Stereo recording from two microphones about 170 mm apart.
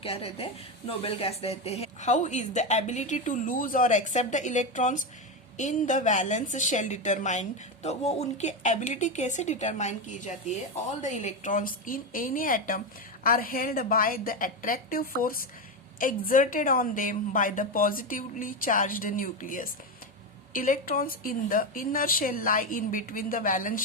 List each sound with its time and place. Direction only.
0.0 s a woman's voice: 35° left (ahead or behind); by 23.8 s 50° left (ahead or behind)